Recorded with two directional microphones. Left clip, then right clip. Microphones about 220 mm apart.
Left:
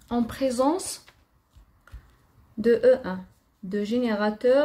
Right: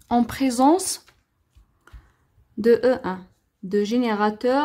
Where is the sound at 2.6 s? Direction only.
45° right (ahead or behind).